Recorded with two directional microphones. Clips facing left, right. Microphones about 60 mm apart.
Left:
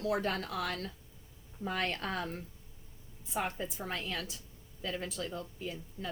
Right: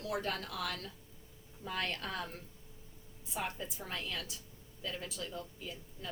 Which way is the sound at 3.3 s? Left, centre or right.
Left.